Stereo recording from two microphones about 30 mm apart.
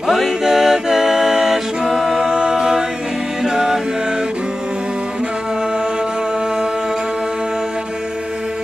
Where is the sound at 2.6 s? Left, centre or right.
Centre.